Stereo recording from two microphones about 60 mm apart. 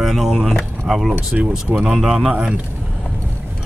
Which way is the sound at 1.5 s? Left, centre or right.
Centre.